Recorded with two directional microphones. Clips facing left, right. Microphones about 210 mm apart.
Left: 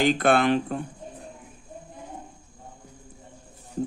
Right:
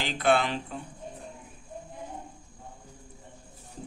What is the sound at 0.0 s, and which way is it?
Speech, 55° left (ahead or behind).